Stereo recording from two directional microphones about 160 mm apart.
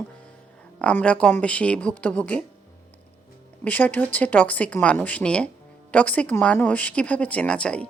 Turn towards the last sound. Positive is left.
turn(degrees=5)  # may be behind; listen again after turning